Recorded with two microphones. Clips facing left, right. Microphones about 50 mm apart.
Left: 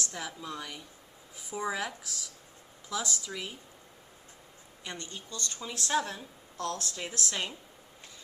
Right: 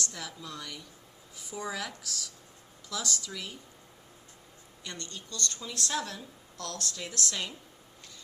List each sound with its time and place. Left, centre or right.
0.0 s speech: left
4.8 s speech: centre